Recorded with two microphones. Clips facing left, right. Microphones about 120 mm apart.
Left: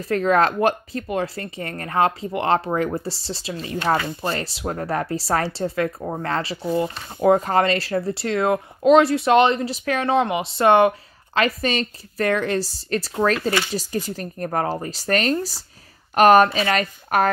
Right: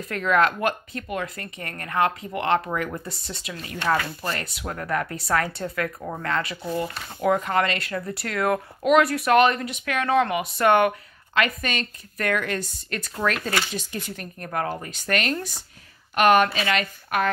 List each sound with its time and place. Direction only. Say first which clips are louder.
0.0 s speech: left 3 dB; 35° left (ahead or behind)
7.2 s speech: left 5 dB; 35° left (ahead or behind)